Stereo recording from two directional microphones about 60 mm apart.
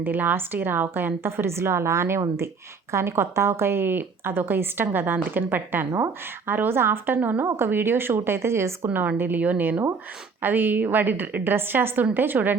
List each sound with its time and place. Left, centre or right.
0.0 s a woman's voice: right
7.4 s a woman's voice: right
8.9 s a woman's voice: right